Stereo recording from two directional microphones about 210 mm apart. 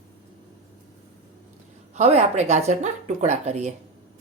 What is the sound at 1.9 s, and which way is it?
Speech, 30° right (ahead or behind).